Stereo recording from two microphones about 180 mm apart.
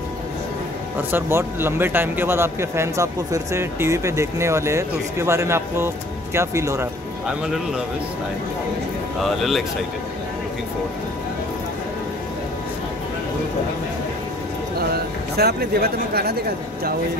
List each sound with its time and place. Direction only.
1.1 s speech: 15° right (ahead or behind)
7.2 s speech: 5° right (ahead or behind)
9.2 s speech: centre (ahead or behind)
14.8 s speech: 60° right (ahead or behind)